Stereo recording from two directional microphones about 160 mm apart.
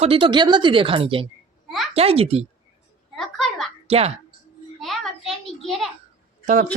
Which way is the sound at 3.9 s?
40° right (ahead or behind).